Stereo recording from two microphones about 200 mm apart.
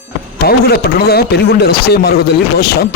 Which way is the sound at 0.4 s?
50° left (ahead or behind).